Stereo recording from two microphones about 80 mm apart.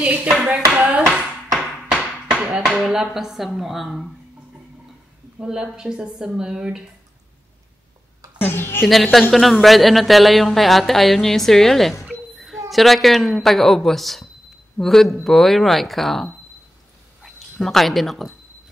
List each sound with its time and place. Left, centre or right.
0.0 s speech: centre
5.4 s speech: centre
8.5 s a woman's voice: left
8.8 s a woman's voice: centre